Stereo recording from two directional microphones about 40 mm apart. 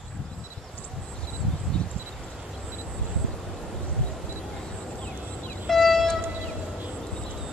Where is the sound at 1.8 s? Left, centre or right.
Left.